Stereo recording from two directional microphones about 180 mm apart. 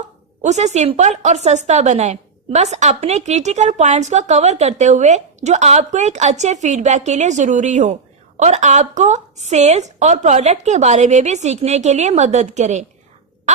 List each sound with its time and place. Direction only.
0.4 s a woman's voice: 40° right (ahead or behind)